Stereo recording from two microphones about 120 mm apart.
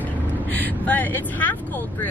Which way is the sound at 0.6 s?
15° left (ahead or behind).